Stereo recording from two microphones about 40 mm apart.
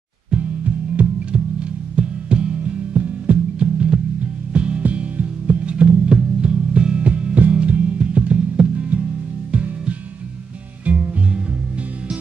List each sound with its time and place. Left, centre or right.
1.0 s music: right
1.3 s music: right
5.7 s music: right